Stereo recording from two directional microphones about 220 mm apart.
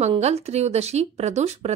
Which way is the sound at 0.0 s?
30° right (ahead or behind).